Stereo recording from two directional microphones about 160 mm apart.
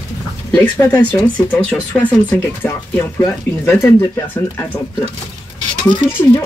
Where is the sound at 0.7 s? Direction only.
25° left (ahead or behind).